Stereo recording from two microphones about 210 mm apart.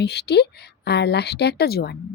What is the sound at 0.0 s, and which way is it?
A woman's voice, 50° left (ahead or behind).